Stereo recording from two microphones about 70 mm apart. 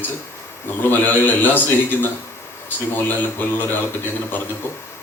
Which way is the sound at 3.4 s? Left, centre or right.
Left.